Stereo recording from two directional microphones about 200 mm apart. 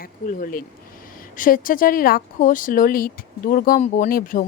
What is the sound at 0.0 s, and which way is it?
Speech, 45° left (ahead or behind).